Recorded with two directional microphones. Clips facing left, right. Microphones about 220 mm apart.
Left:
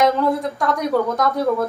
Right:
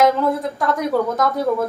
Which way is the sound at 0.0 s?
Centre (ahead or behind).